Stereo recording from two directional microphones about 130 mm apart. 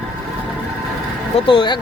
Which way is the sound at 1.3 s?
40° left (ahead or behind).